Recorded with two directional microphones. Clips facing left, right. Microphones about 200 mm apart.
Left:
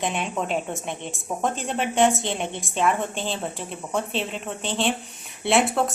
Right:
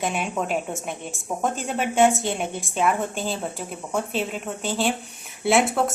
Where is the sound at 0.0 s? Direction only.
5° right (ahead or behind).